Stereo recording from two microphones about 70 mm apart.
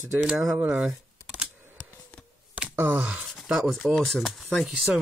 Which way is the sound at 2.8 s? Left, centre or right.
Right.